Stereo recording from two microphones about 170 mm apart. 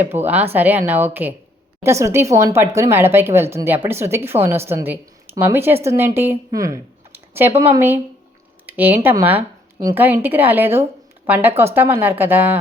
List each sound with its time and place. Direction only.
0.1 s speech: 10° right (ahead or behind)